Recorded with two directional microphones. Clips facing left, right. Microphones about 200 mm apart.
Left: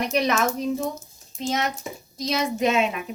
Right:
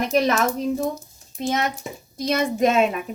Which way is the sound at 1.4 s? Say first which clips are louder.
Right 2 dB; 55° right (ahead or behind).